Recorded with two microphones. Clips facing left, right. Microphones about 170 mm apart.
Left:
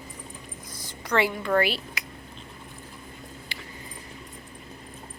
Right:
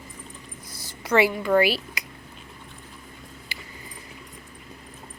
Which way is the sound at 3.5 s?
5° right (ahead or behind).